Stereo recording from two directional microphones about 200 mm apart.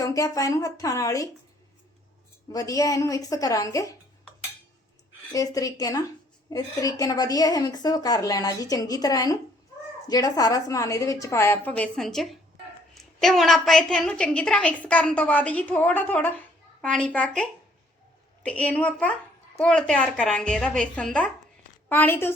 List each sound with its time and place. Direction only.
0.0 s a woman's voice: 15° left (ahead or behind)
2.5 s a woman's voice: 15° left (ahead or behind)
5.3 s a woman's voice: 15° left (ahead or behind)